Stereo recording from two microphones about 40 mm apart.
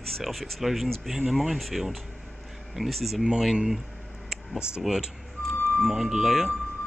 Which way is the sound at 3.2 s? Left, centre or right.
Centre.